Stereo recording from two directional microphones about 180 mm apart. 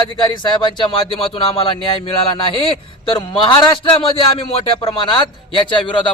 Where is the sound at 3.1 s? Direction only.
25° left (ahead or behind).